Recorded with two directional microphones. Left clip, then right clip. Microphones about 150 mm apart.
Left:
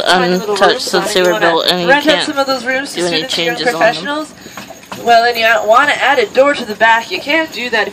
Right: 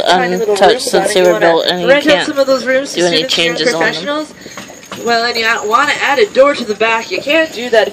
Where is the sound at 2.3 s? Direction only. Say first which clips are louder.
Right 3 dB; 40° left (ahead or behind).